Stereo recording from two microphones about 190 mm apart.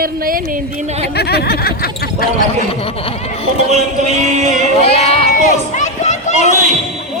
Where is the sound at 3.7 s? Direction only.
35° right (ahead or behind).